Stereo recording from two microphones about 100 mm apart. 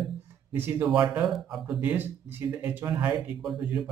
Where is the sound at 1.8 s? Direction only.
20° right (ahead or behind).